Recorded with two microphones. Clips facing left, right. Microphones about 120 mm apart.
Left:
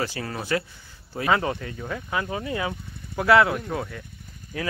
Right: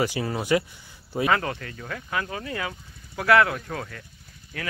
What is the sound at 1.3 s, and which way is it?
Speech, 20° left (ahead or behind).